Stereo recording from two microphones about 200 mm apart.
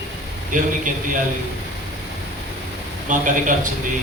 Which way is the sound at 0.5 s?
40° right (ahead or behind).